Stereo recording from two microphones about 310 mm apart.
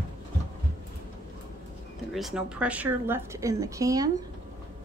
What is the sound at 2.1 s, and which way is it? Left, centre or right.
A woman's voice, centre.